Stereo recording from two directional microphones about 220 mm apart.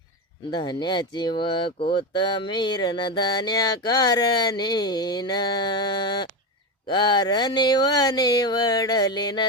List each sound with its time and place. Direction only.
0.5 s speech: 20° left (ahead or behind)